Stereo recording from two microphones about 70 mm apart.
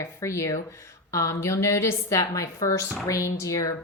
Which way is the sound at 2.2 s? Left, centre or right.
Left.